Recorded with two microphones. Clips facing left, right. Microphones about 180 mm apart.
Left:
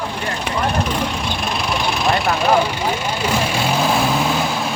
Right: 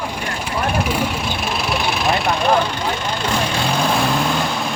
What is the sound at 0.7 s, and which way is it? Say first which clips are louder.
Vehicle: right 1 dB; 10° right (ahead or behind).